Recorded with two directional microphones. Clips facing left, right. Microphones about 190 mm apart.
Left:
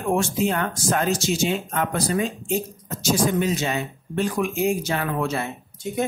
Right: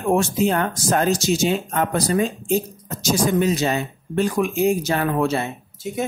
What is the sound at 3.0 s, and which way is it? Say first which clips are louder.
Speech: right 2 dB; 40° right (ahead or behind).